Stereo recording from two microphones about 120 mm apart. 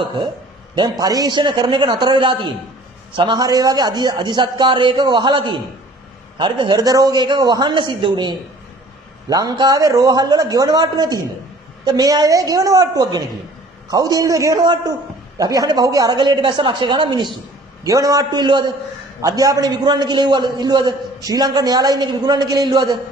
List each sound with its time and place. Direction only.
0.7 s a man's voice: 35° right (ahead or behind)
17.8 s a man's voice: 30° right (ahead or behind)